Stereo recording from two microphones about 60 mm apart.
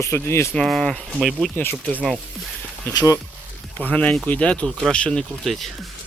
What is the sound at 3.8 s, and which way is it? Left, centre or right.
Speech, left.